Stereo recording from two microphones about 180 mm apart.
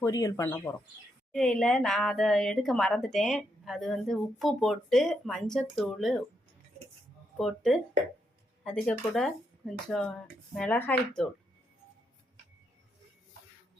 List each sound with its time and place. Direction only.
0.0 s speech: 15° left (ahead or behind)
1.3 s speech: 5° left (ahead or behind)
7.3 s speech: centre (ahead or behind)